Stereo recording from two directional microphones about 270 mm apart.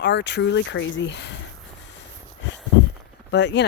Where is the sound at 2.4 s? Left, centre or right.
Left.